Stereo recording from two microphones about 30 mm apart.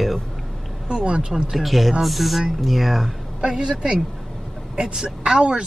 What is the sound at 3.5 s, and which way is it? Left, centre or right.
Speech, right.